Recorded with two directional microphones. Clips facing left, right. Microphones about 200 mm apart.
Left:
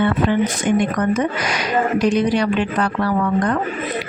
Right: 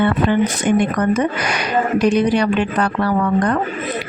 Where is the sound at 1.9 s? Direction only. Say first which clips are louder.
Right 3 dB; 60° right (ahead or behind).